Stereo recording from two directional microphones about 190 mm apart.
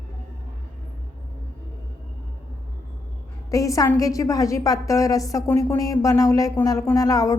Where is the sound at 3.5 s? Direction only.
15° left (ahead or behind).